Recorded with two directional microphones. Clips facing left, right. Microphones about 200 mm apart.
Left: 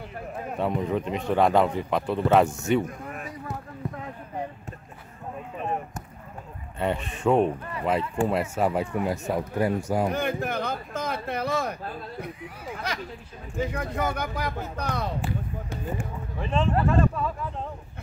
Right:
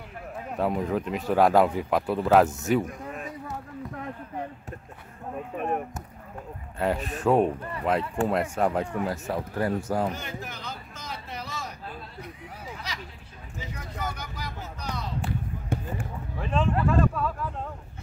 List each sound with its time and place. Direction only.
0.6 s speech: centre (ahead or behind)
6.8 s speech: centre (ahead or behind)
10.1 s a sound: 55° left (ahead or behind)
13.6 s speech: 55° left (ahead or behind)
15.7 s a sound: 55° right (ahead or behind)
16.3 s speech: centre (ahead or behind)